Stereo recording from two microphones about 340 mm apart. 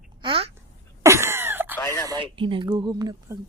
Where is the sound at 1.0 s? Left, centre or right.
Centre.